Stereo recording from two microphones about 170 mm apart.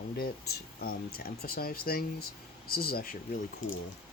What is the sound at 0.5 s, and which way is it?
Speech, 60° left (ahead or behind).